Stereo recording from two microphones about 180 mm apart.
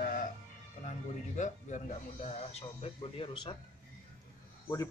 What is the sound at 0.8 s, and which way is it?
Speech, 45° left (ahead or behind).